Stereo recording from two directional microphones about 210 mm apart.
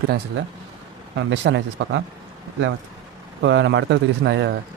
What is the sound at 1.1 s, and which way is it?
Speech, 60° right (ahead or behind).